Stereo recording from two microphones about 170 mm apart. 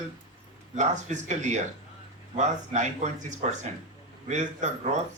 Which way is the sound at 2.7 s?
45° right (ahead or behind).